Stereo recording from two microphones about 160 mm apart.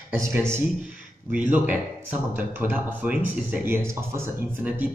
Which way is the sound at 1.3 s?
10° right (ahead or behind).